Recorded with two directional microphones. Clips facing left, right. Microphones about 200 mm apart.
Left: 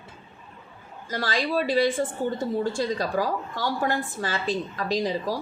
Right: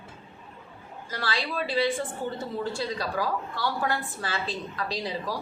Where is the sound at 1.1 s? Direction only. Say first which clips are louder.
Left 5 dB; 45° left (ahead or behind).